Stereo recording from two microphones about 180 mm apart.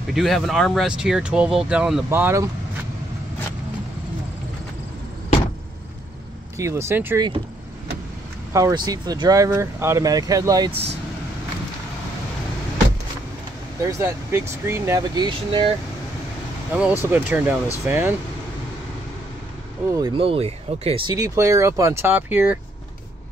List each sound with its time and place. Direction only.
0.1 s speech: centre (ahead or behind)
6.6 s speech: 15° right (ahead or behind)
8.5 s speech: 20° right (ahead or behind)
10.7 s speech: 35° right (ahead or behind)
13.8 s speech: 15° right (ahead or behind)
16.7 s speech: 10° right (ahead or behind)
20.0 s speech: 30° right (ahead or behind); by 22.6 s 10° right (ahead or behind)